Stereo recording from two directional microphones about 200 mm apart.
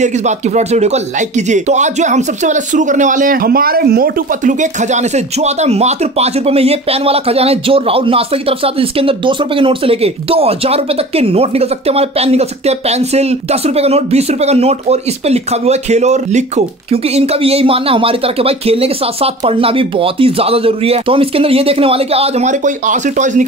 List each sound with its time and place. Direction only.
0.0 s speech: 35° right (ahead or behind)